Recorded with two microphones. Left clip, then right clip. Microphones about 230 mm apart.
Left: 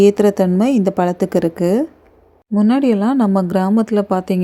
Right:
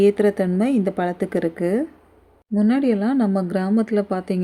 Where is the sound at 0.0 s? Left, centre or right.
Left.